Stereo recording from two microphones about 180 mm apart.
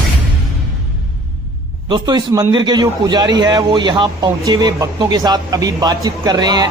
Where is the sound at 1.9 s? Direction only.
25° right (ahead or behind).